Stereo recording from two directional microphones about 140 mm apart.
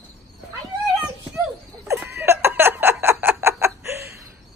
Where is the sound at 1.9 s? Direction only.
15° right (ahead or behind).